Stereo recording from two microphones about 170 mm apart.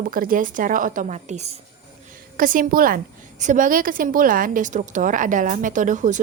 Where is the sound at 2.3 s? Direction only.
55° right (ahead or behind).